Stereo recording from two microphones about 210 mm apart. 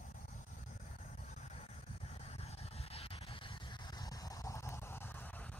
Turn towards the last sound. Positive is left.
turn(degrees=10)  # may be behind; listen again after turning